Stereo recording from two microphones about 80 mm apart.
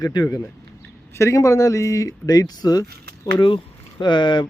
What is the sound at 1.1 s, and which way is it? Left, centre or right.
Speech, left.